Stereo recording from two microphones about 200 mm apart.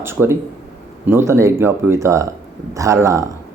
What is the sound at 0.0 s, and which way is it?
Speech, 10° right (ahead or behind).